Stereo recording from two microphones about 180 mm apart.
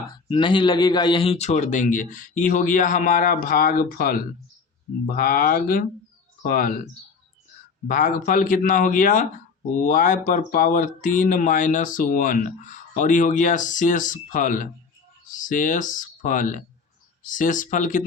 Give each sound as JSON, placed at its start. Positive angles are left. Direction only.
{"t": 0.1, "sound": "a man's voice", "side_deg": 25}
{"t": 7.9, "sound": "speech", "side_deg": 50}